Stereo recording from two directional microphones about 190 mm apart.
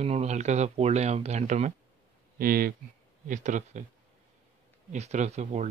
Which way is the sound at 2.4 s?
50° right (ahead or behind).